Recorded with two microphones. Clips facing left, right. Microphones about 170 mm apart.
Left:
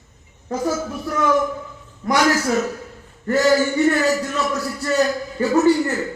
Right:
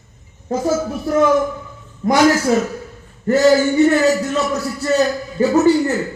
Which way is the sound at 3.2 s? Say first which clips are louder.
Right 4 dB; 25° right (ahead or behind).